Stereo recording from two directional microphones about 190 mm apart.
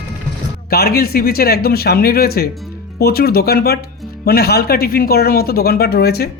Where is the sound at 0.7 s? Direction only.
55° left (ahead or behind).